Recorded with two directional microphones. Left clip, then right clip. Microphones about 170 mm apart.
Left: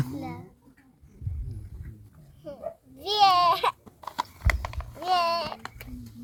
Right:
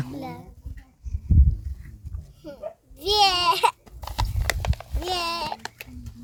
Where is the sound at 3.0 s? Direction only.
50° right (ahead or behind).